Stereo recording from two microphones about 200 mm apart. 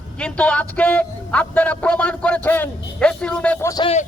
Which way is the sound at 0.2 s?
5° left (ahead or behind).